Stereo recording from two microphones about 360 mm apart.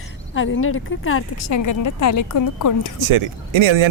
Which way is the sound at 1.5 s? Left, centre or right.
Left.